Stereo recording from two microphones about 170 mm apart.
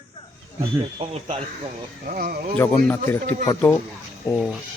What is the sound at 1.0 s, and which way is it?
Speech, 35° right (ahead or behind).